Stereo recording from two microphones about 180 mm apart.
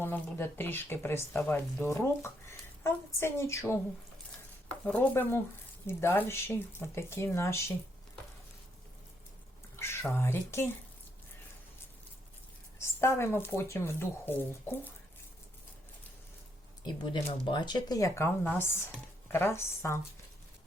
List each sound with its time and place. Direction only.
0.0 s speech: 10° left (ahead or behind)
4.9 s speech: 10° left (ahead or behind)
9.7 s speech: 15° left (ahead or behind)
12.8 s speech: 15° left (ahead or behind)
16.8 s speech: 25° left (ahead or behind)